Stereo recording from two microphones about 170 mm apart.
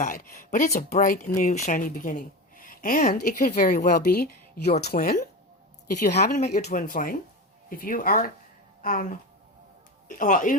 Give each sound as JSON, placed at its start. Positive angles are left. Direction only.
{"t": 0.0, "sound": "speech", "side_deg": 55}
{"t": 6.1, "sound": "speech", "side_deg": 70}